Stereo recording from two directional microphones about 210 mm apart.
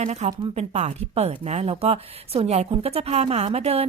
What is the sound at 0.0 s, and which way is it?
Speech, 35° right (ahead or behind).